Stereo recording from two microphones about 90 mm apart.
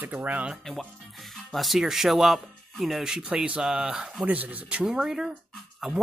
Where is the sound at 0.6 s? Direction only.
5° left (ahead or behind).